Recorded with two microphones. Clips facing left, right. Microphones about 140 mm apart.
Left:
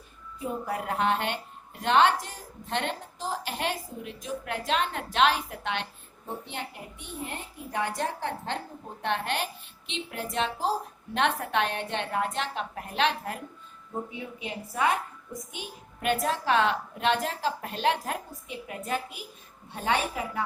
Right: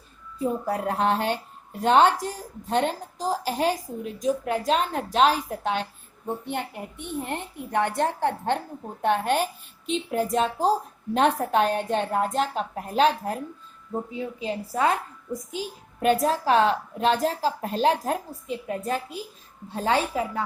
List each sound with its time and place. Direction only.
0.9 s a woman's voice: 35° right (ahead or behind)
6.2 s a woman's voice: 55° right (ahead or behind); by 20.4 s 30° right (ahead or behind)